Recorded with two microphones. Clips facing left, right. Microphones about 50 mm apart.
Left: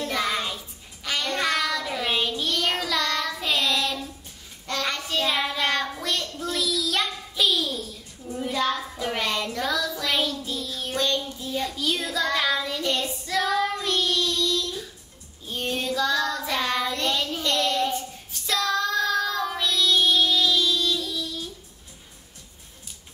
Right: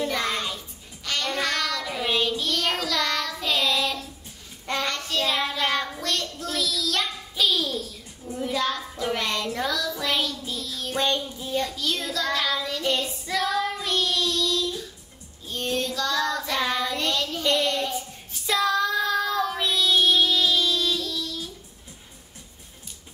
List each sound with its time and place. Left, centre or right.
0.1 s child singing: centre
1.0 s music: centre
1.3 s child singing: centre
9.7 s music: centre
9.9 s child singing: centre
11.0 s child singing: right
11.5 s child singing: centre
15.4 s female singing: centre
16.2 s child singing: centre
17.4 s a sound: centre
17.9 s child singing: centre
21.0 s music: centre